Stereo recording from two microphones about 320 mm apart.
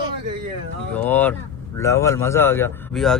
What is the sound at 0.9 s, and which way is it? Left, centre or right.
Speech, centre.